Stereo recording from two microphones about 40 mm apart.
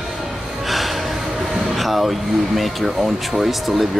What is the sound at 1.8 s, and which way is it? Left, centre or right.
Speech, centre.